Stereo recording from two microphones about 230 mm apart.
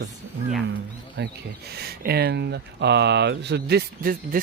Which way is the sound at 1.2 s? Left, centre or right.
Right.